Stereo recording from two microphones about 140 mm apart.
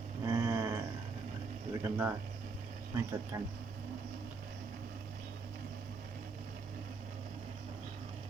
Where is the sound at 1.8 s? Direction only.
15° right (ahead or behind).